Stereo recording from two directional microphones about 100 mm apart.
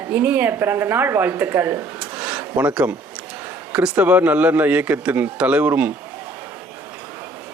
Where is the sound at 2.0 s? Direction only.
15° right (ahead or behind).